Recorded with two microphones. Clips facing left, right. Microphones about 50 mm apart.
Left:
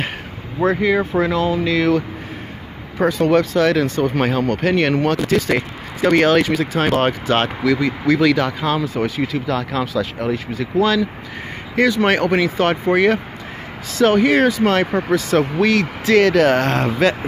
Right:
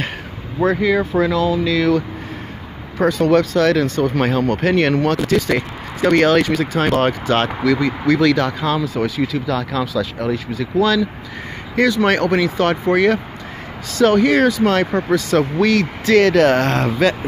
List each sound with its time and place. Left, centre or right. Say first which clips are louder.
0.7 s speech: even; left
3.0 s speech: right 1 dB; centre
4.2 s speech: right 1 dB; centre
5.3 s speech: even; centre
8.7 s speech: right 1 dB; left
15.1 s speech: even; left; by 16.9 s centre
17.0 s speech: even; left